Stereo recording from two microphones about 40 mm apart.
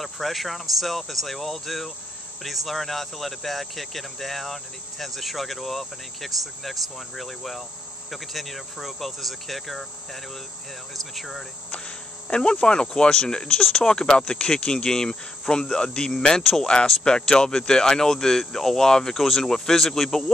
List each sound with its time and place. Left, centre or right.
0.0 s speech: centre
10.9 s speech: centre
12.3 s speech: left
19.1 s speech: centre